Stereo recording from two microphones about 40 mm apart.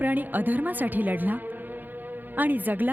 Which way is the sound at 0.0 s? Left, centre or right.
Right.